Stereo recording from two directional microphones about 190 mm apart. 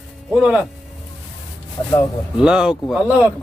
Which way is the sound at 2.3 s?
5° right (ahead or behind).